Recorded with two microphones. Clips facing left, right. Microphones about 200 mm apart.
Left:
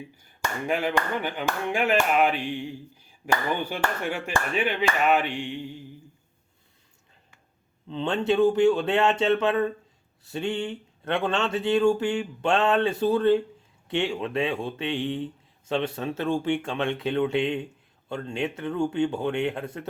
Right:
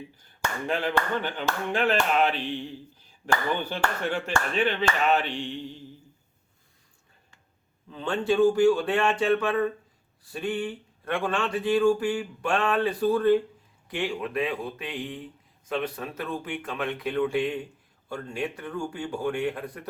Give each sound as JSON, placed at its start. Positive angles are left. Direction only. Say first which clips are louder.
{"t": 0.7, "sound": "speech", "louder": "left 1 dB", "side_deg": 10}
{"t": 7.9, "sound": "speech", "louder": "left 2 dB", "side_deg": 25}